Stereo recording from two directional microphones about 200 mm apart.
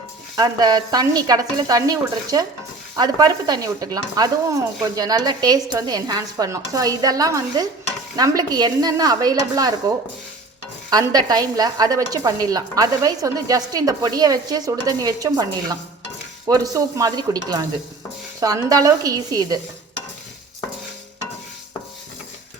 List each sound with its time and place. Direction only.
0.3 s a woman's voice: 20° right (ahead or behind)
10.8 s a woman's voice: 20° right (ahead or behind)
16.5 s dishes: 15° right (ahead or behind)
18.3 s a woman's voice: 15° right (ahead or behind)